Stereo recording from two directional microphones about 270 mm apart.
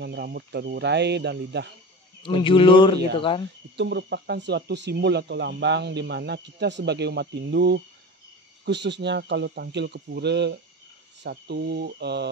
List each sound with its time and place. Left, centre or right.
0.0 s speech: right
2.2 s speech: centre
3.7 s speech: right